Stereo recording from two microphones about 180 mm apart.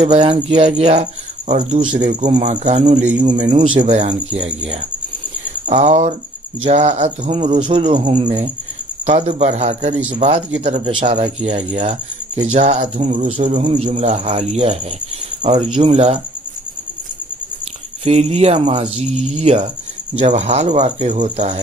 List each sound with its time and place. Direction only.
0.0 s speech: 30° right (ahead or behind)
5.7 s speech: 40° right (ahead or behind)
18.0 s speech: 35° right (ahead or behind)